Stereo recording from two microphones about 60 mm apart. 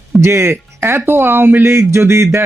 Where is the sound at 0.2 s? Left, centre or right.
Right.